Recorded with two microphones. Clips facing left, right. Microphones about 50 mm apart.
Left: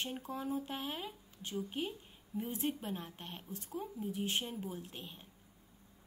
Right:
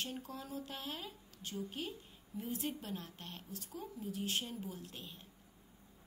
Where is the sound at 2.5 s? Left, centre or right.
Left.